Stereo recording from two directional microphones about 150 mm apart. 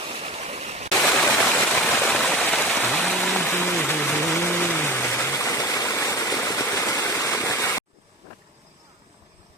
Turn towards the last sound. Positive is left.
turn(degrees=20)  # may be behind; listen again after turning